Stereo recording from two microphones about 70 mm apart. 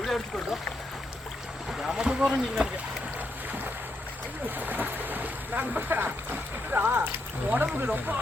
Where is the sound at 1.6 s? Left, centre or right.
Centre.